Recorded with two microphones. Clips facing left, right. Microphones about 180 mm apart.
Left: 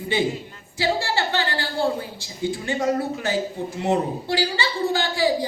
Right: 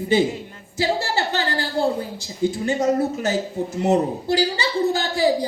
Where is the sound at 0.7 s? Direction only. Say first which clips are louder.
Right 1 dB; 40° right (ahead or behind).